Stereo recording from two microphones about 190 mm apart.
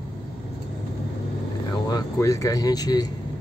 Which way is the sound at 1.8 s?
20° left (ahead or behind).